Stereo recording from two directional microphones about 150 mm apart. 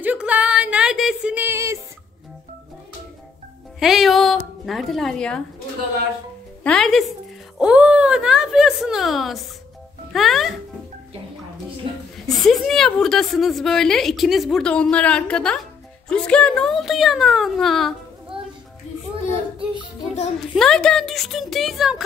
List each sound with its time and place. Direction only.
0.0 s a sound: 10° right (ahead or behind)
3.8 s a woman's voice: centre (ahead or behind)
6.6 s a woman's voice: 5° left (ahead or behind)
11.8 s music: 35° right (ahead or behind)
12.4 s a woman's voice: centre (ahead or behind)
20.3 s a woman's voice: 5° left (ahead or behind)